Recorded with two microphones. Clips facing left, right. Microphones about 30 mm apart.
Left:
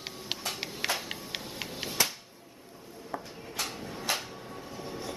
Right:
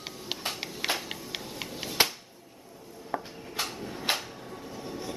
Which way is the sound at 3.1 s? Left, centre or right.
Right.